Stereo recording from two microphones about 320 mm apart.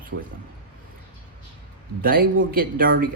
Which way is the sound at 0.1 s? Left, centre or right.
Right.